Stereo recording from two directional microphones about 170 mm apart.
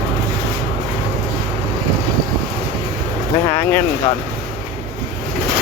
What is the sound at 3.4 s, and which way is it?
Speech, 15° left (ahead or behind).